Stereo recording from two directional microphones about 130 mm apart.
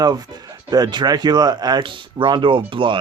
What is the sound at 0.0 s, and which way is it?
Speech, 30° right (ahead or behind).